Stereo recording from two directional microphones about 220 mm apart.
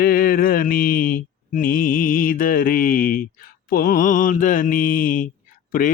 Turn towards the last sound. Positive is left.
turn(degrees=40)  # may be behind; listen again after turning